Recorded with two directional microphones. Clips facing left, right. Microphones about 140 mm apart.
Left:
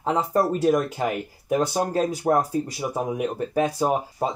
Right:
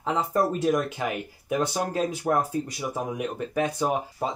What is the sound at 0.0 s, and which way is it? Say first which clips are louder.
Speech: left 3 dB; 40° left (ahead or behind).